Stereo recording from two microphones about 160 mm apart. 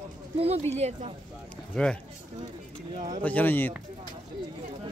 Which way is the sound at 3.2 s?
10° left (ahead or behind).